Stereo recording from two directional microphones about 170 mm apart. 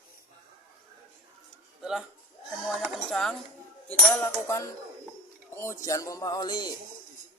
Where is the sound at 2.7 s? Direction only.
Centre (ahead or behind).